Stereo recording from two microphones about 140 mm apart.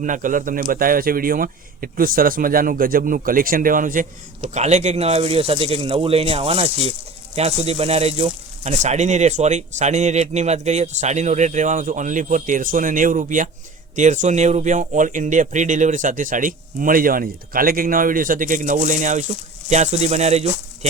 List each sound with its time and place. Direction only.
0.0 s speech: 70° right (ahead or behind)
4.4 s speech: 55° right (ahead or behind)